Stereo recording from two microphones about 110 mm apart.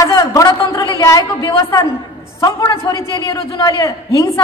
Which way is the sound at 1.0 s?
30° left (ahead or behind).